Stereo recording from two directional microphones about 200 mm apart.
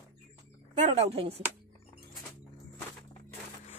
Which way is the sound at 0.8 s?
30° right (ahead or behind).